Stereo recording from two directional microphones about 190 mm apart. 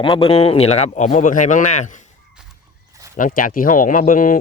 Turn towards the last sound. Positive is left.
turn(degrees=45)  # may be behind; listen again after turning